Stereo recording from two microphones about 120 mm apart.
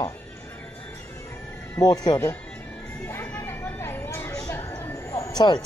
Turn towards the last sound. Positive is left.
turn(degrees=35)  # may be behind; listen again after turning